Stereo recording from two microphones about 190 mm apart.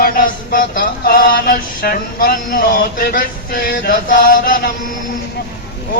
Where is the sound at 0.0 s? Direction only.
50° left (ahead or behind).